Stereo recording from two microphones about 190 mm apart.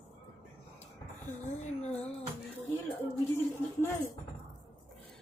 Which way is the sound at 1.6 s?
35° left (ahead or behind).